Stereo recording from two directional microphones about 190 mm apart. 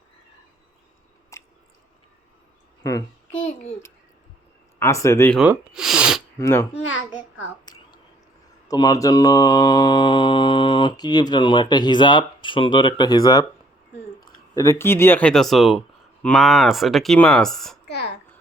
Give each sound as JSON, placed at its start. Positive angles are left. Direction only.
{"t": 1.3, "sound": "chewing", "side_deg": 15}
{"t": 4.8, "sound": "speech", "side_deg": 15}
{"t": 5.4, "sound": "sneeze", "side_deg": -5}
{"t": 6.4, "sound": "speech", "side_deg": 15}
{"t": 7.6, "sound": "a sound", "side_deg": 20}
{"t": 8.6, "sound": "mantra", "side_deg": 20}
{"t": 14.2, "sound": "speech", "side_deg": 15}
{"t": 17.8, "sound": "a sound", "side_deg": 60}